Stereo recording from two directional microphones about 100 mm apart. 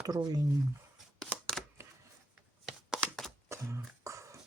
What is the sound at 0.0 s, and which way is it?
Speech, 40° right (ahead or behind).